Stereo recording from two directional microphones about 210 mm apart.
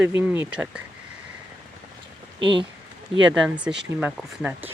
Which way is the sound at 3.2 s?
5° right (ahead or behind).